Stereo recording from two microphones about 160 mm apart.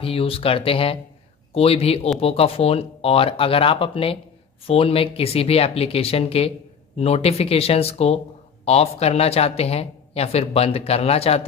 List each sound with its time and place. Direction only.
0.0 s speech: 35° left (ahead or behind)